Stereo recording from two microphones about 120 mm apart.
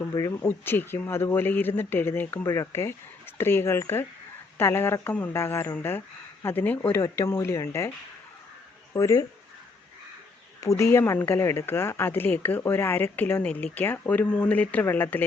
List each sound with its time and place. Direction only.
0.4 s speech: 15° left (ahead or behind)
8.9 s speech: 30° left (ahead or behind)
10.6 s speech: 25° left (ahead or behind)